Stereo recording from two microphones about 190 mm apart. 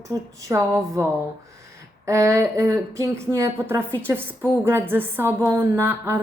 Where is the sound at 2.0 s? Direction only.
15° right (ahead or behind).